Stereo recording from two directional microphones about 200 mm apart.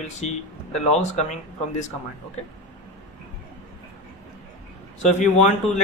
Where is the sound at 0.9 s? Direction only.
35° left (ahead or behind).